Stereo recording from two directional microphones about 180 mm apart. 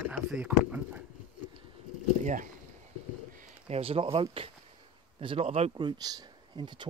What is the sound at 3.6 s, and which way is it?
Speech, 35° right (ahead or behind).